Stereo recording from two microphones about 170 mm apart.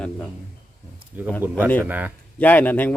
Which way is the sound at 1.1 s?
10° right (ahead or behind).